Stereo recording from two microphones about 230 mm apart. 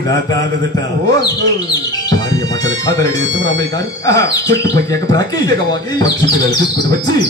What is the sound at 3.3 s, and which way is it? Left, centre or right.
Speech, right.